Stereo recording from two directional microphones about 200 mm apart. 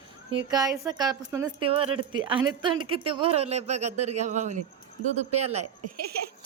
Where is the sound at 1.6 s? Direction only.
25° right (ahead or behind).